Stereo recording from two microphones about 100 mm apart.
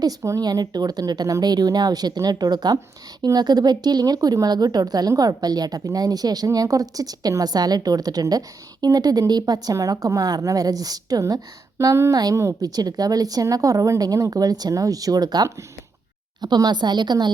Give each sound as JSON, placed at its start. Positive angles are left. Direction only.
{"t": 0.0, "sound": "a woman's voice", "side_deg": -35}